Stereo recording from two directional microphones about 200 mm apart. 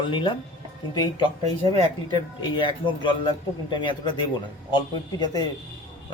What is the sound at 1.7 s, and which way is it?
Speech, 25° left (ahead or behind).